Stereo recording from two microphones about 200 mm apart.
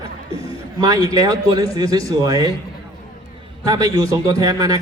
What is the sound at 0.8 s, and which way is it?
A man's voice, 15° right (ahead or behind).